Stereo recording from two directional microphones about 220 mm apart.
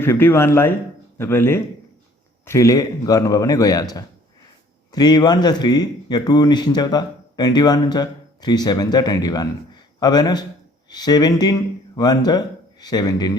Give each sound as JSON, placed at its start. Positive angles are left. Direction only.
{"t": 0.0, "sound": "a man's voice", "side_deg": 10}